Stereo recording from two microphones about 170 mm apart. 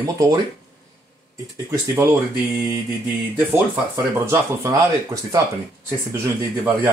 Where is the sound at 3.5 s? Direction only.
15° right (ahead or behind).